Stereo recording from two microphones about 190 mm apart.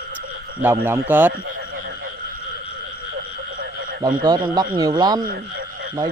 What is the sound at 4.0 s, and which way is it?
Speech, 20° right (ahead or behind).